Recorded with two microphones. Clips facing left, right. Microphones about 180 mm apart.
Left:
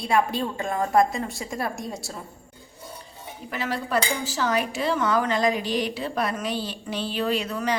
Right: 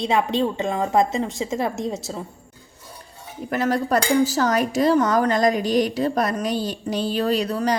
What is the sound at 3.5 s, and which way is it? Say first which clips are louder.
Speech: right 6 dB; 45° right (ahead or behind).